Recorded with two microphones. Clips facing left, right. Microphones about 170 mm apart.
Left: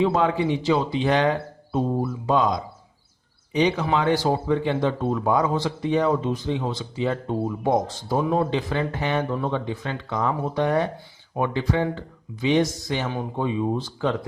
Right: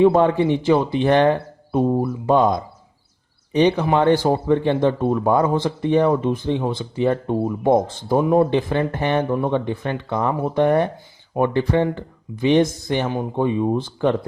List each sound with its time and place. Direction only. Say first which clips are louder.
0.0 s speech: right 6 dB; 55° right (ahead or behind)